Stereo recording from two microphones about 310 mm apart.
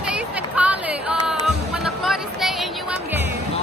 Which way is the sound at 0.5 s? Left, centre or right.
Centre.